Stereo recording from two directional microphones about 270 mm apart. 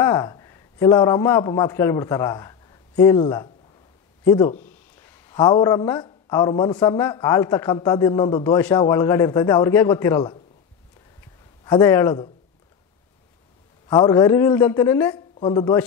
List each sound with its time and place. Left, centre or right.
0.0 s a man's voice: centre
11.6 s speech: centre
13.8 s speech: centre